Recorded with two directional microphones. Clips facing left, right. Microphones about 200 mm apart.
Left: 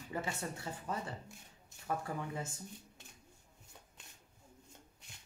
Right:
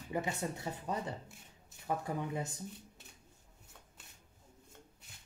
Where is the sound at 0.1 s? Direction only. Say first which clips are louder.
Right 4 dB; 15° right (ahead or behind).